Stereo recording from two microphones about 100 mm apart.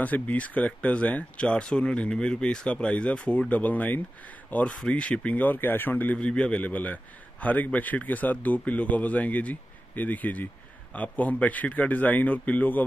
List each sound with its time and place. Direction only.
0.0 s speech: 15° left (ahead or behind)